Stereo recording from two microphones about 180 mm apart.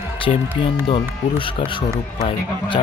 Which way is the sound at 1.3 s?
30° left (ahead or behind).